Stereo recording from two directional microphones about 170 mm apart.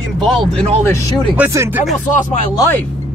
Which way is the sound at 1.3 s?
15° right (ahead or behind).